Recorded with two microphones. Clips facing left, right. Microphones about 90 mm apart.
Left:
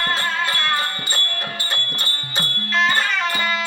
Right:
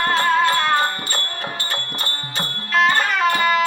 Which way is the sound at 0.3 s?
35° right (ahead or behind).